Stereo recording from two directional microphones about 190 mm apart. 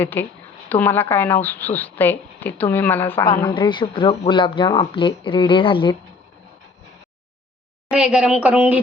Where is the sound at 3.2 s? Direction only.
20° left (ahead or behind).